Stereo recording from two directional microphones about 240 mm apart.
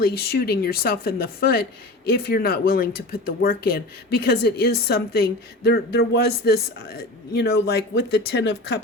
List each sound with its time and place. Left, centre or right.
0.0 s speech: left